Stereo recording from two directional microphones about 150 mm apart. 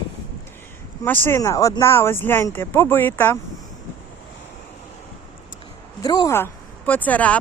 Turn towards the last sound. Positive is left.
turn(degrees=10)  # may be behind; listen again after turning